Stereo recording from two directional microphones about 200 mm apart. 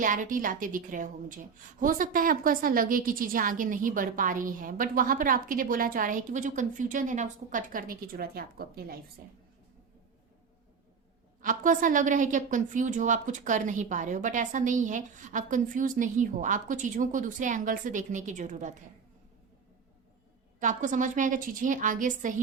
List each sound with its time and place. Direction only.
0.0 s a woman's voice: 40° right (ahead or behind)
11.4 s a woman's voice: 40° right (ahead or behind)
20.6 s a woman's voice: 40° right (ahead or behind)